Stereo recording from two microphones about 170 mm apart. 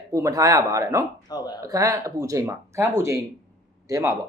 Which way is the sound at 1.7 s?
20° right (ahead or behind).